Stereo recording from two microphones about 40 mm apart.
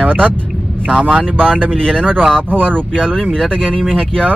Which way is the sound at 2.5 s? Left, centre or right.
Right.